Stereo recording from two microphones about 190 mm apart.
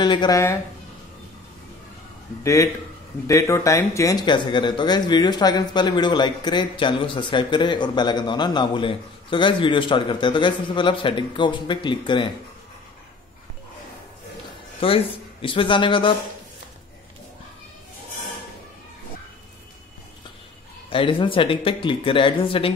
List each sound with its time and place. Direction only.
0.0 s speech: 25° left (ahead or behind)
2.4 s speech: 15° left (ahead or behind)
14.8 s speech: 30° left (ahead or behind)
20.9 s speech: 25° left (ahead or behind)